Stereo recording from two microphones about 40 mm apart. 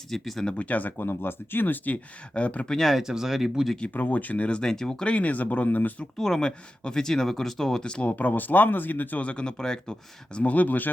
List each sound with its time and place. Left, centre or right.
0.1 s speech: centre
0.6 s speech: left
2.3 s speech: left
3.0 s speech: centre
3.9 s speech: left
4.6 s speech: centre
5.0 s speech: left
6.1 s speech: centre
8.0 s speech: left
9.2 s speech: left
10.4 s speech: left